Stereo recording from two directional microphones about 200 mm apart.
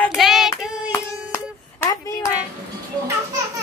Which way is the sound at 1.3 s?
15° left (ahead or behind).